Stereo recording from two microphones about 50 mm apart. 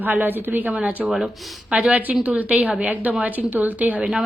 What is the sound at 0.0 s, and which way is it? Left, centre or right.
A woman's voice, right.